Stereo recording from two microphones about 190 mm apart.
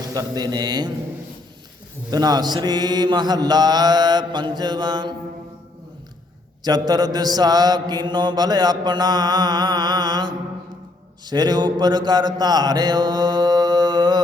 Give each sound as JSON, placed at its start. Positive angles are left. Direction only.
{"t": 0.0, "sound": "mantra", "side_deg": -20}
{"t": 2.0, "sound": "mantra", "side_deg": -20}
{"t": 6.7, "sound": "mantra", "side_deg": -20}